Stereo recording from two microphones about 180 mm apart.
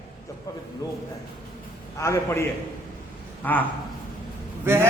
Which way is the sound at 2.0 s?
15° left (ahead or behind).